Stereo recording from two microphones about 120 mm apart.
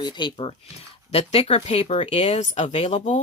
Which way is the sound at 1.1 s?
60° left (ahead or behind).